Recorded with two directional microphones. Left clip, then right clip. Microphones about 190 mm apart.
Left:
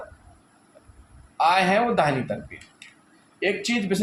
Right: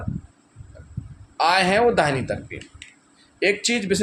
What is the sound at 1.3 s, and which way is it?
Speech, 35° right (ahead or behind).